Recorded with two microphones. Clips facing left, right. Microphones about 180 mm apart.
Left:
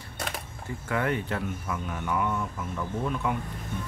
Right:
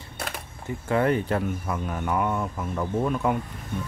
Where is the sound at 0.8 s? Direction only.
35° right (ahead or behind).